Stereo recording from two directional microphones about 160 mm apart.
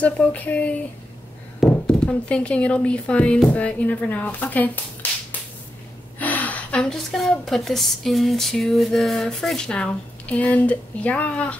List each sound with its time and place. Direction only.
0.0 s speech: 10° left (ahead or behind)
6.1 s a woman's voice: 10° left (ahead or behind)